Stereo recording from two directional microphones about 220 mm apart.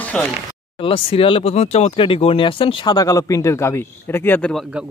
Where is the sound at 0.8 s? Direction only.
25° left (ahead or behind); by 4.6 s 5° left (ahead or behind).